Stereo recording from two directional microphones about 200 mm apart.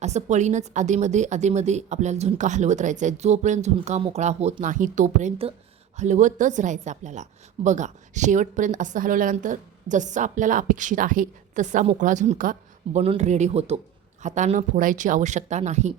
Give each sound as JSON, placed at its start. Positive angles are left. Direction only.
{"t": 0.0, "sound": "a woman's voice", "side_deg": -35}